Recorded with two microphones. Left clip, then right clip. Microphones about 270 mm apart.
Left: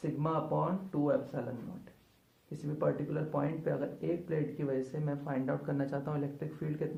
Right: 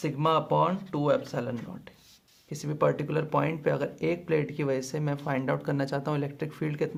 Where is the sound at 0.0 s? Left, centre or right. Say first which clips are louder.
Right 8 dB; right.